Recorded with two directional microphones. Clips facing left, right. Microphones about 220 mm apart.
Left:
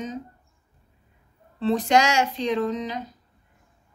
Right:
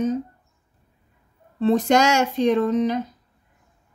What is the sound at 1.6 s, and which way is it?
Speech, 45° right (ahead or behind).